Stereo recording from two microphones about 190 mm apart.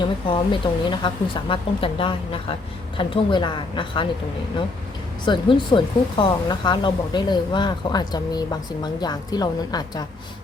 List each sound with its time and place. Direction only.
0.3 s speech: 25° left (ahead or behind)
5.2 s speech: 25° left (ahead or behind)